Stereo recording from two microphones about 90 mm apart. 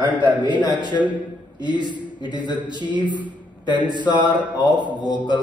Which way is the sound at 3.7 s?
60° right (ahead or behind).